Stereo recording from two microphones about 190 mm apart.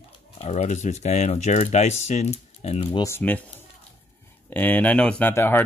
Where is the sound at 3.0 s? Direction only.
10° left (ahead or behind).